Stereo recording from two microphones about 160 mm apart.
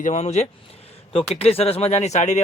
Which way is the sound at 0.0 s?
45° left (ahead or behind).